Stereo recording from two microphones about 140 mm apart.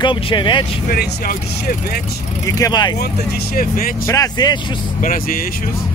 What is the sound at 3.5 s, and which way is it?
Speech, 90° left.